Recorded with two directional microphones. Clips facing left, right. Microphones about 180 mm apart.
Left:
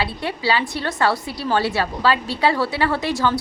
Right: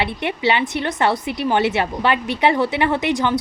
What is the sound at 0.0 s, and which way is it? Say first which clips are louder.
A woman's voice: right 3 dB; 20° right (ahead or behind).